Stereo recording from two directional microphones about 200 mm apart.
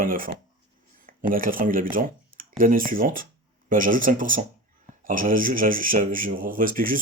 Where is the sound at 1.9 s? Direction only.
45° right (ahead or behind).